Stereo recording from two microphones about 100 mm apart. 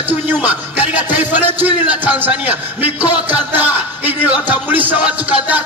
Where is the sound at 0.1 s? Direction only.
15° right (ahead or behind).